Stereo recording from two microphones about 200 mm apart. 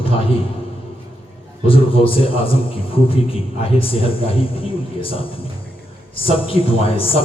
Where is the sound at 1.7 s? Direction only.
25° left (ahead or behind).